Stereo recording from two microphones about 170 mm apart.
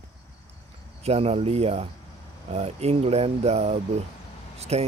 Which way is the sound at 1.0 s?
35° right (ahead or behind).